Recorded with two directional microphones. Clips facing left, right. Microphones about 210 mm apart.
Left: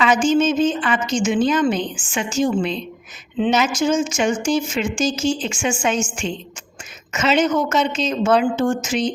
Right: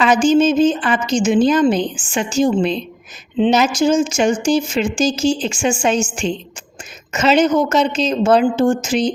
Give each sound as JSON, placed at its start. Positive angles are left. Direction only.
{"t": 0.0, "sound": "a woman's voice", "side_deg": -35}